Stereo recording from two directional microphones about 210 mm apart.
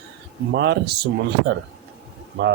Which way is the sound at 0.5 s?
55° right (ahead or behind).